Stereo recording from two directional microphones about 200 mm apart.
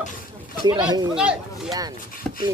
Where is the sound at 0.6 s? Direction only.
20° right (ahead or behind).